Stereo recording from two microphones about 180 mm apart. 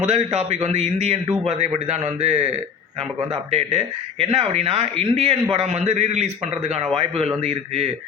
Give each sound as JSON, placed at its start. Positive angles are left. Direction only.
{"t": 0.1, "sound": "speech", "side_deg": -35}